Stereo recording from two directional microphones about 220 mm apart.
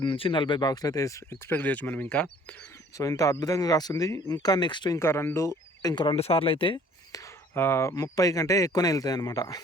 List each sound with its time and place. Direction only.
0.0 s speech: 20° left (ahead or behind)
7.5 s speech: 10° left (ahead or behind)